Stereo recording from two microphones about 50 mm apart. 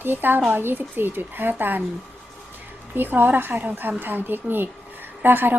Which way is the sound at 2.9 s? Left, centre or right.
Right.